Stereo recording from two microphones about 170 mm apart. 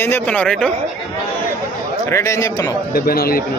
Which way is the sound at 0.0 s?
10° left (ahead or behind).